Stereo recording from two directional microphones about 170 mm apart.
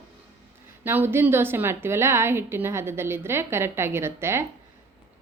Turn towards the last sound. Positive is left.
turn(degrees=-15)  # may be behind; listen again after turning